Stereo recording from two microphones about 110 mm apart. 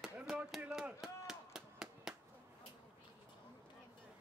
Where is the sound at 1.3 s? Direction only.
5° right (ahead or behind).